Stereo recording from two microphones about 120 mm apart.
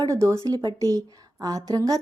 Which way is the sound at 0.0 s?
25° right (ahead or behind).